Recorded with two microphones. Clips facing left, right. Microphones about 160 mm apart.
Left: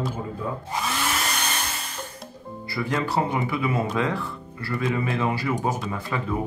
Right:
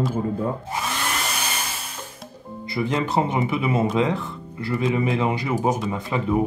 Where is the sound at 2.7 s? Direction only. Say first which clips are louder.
Right 3 dB; 20° right (ahead or behind).